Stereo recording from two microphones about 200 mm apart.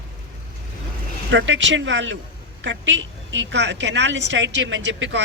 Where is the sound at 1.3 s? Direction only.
65° right (ahead or behind).